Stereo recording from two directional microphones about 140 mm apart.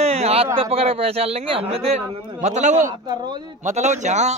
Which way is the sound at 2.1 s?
55° right (ahead or behind).